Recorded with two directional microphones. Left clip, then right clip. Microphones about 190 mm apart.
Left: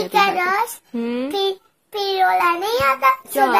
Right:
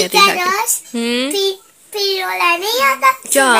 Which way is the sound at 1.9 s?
35° left (ahead or behind).